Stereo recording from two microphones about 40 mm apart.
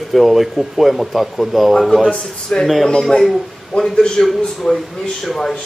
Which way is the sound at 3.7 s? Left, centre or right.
Centre.